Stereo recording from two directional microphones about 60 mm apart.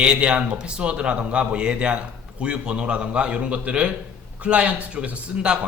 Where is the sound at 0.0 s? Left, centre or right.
Centre.